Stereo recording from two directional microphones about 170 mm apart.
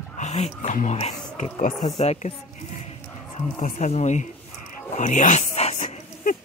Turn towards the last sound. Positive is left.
turn(degrees=50)  # may be behind; listen again after turning